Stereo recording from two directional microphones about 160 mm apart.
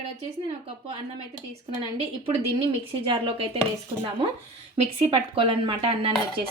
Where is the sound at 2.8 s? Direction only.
35° right (ahead or behind).